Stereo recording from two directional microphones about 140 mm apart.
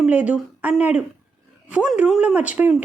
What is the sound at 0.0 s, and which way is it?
Speech, 10° right (ahead or behind).